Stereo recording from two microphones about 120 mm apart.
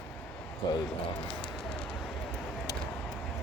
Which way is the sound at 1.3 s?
5° left (ahead or behind).